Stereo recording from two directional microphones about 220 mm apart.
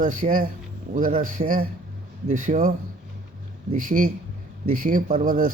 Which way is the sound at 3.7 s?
40° right (ahead or behind).